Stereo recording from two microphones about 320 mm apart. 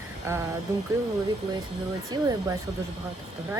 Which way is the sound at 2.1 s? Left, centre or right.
Centre.